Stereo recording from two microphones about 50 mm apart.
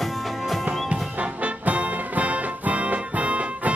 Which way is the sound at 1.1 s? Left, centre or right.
Right.